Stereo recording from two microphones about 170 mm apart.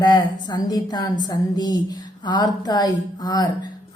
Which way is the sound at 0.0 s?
25° left (ahead or behind).